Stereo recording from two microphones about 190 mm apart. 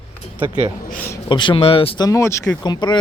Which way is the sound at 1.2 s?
25° left (ahead or behind).